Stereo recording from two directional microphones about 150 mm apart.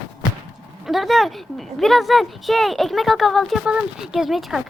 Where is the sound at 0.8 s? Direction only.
Centre (ahead or behind).